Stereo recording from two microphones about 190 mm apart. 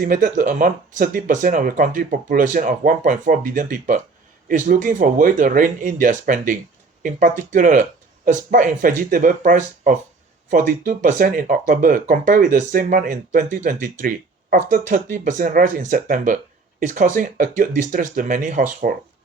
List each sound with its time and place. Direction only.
0.0 s speech: 45° right (ahead or behind)